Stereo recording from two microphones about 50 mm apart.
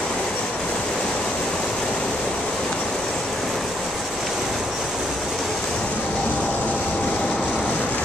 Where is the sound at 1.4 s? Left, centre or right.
Centre.